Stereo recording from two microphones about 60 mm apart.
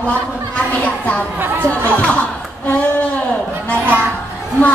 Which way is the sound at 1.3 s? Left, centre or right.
Right.